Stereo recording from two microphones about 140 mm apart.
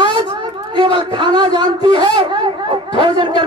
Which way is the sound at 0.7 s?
35° right (ahead or behind).